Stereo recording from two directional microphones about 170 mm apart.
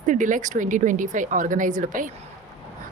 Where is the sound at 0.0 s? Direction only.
50° right (ahead or behind).